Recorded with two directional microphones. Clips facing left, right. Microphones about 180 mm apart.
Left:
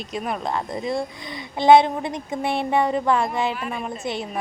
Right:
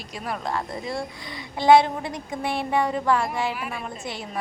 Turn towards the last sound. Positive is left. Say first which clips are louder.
# left 5 dB
turn(degrees=20)  # may be behind; listen again after turning